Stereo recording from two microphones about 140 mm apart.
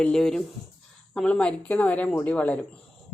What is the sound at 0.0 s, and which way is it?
Speech, 5° left (ahead or behind).